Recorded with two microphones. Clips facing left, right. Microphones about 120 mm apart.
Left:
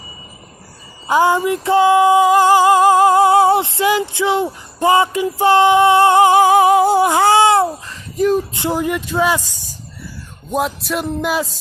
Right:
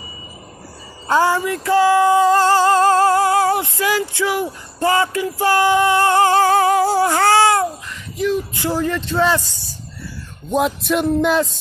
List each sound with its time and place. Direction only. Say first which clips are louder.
1.0 s a sound: left 2 dB; 15° left (ahead or behind)
8.5 s speech: left 1 dB; 15° left (ahead or behind)
10.5 s music: right 2 dB; centre (ahead or behind)